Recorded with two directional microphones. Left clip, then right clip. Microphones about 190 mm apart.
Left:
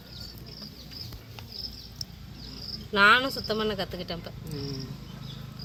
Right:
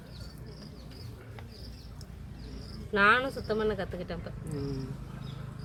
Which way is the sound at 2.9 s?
25° left (ahead or behind).